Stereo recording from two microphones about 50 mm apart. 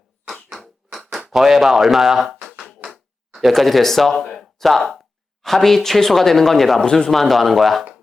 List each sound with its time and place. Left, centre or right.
0.9 s a sound: centre
1.3 s speech: centre
6.8 s speech: centre
7.1 s speech: centre